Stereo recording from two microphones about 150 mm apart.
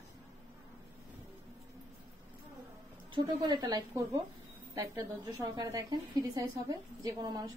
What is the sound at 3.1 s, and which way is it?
A woman's voice, 30° right (ahead or behind).